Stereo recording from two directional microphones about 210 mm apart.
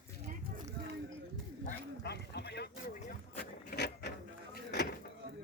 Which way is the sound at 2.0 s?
50° left (ahead or behind).